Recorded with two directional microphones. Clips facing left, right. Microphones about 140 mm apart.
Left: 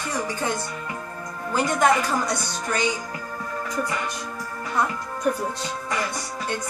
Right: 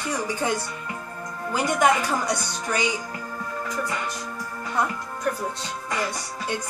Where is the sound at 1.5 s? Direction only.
10° right (ahead or behind).